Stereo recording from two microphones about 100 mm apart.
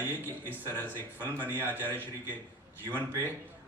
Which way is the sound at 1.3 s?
20° right (ahead or behind).